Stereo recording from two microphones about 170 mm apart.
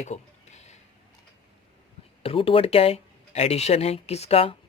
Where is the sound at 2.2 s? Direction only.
35° left (ahead or behind).